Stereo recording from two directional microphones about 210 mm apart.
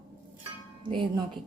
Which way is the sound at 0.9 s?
25° right (ahead or behind).